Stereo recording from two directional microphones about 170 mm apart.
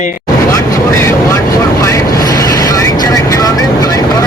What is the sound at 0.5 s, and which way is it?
Vehicle, 15° left (ahead or behind).